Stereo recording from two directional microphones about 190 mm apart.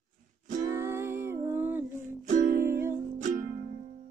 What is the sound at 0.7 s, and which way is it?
Music, 15° right (ahead or behind).